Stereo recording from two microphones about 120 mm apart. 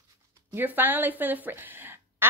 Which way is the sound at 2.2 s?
20° right (ahead or behind).